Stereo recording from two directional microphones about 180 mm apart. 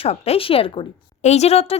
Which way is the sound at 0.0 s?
35° left (ahead or behind).